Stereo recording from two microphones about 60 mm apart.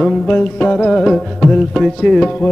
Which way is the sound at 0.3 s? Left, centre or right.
Left.